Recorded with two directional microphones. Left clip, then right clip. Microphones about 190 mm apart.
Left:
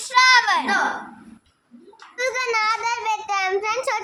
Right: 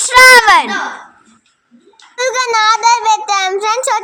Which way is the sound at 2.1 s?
25° right (ahead or behind).